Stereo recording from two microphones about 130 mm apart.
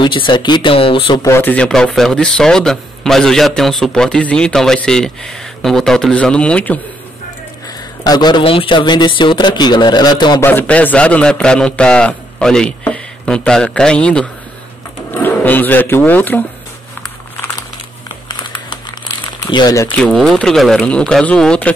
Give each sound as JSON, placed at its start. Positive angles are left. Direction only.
{"t": 0.0, "sound": "speech", "side_deg": 40}
{"t": 1.2, "sound": "speech", "side_deg": 15}
{"t": 8.0, "sound": "speech", "side_deg": 30}
{"t": 10.4, "sound": "a man's voice", "side_deg": 15}
{"t": 18.0, "sound": "crumpling", "side_deg": 35}
{"t": 19.5, "sound": "speech", "side_deg": 30}
{"t": 20.1, "sound": "speech", "side_deg": 0}